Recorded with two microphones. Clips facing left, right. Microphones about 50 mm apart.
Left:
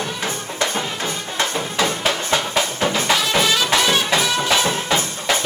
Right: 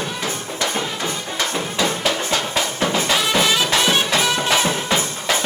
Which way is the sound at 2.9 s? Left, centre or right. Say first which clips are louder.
Right 1 dB; centre.